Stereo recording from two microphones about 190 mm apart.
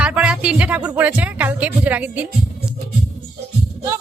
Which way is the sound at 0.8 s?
15° right (ahead or behind).